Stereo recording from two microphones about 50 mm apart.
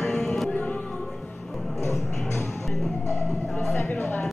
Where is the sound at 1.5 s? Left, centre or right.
Centre.